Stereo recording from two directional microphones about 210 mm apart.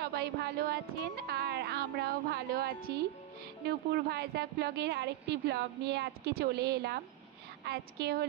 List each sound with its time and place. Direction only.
0.0 s a woman's voice: 50° right (ahead or behind)